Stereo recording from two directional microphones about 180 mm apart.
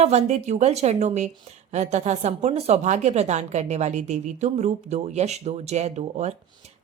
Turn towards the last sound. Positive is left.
turn(degrees=-40)  # may be behind; listen again after turning